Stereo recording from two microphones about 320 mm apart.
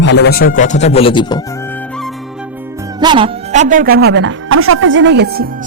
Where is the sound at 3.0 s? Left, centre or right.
Centre.